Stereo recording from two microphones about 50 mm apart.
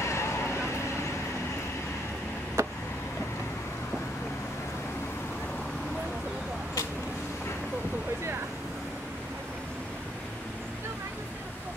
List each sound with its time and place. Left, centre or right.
0.0 s vehicle: left
2.6 s vehicle: right